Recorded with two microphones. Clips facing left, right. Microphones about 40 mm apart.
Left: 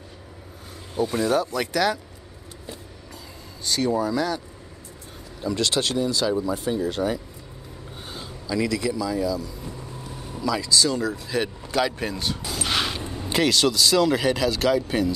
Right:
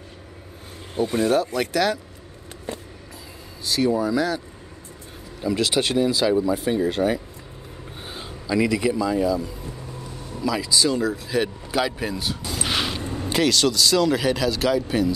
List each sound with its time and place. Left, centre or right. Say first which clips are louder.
0.9 s speech: right 2 dB; right; by 2.0 s centre
3.6 s speech: right 2 dB; centre
5.4 s speech: right 2 dB; centre
6.4 s speech: right 3 dB; centre; by 9.5 s right
10.4 s speech: right 1 dB; centre